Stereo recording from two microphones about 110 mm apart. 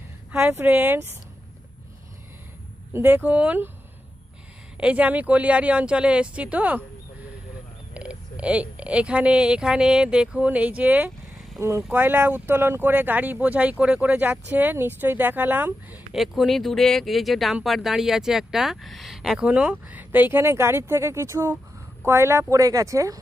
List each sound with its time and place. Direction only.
0.3 s speech: 20° right (ahead or behind)
2.9 s speech: 20° right (ahead or behind)
4.8 s speech: 10° right (ahead or behind)
7.9 s speech: 10° right (ahead or behind)
16.1 s speech: centre (ahead or behind); by 23.2 s 30° right (ahead or behind)